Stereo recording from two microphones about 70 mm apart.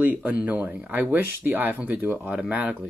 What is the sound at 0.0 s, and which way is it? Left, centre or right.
Speech, right.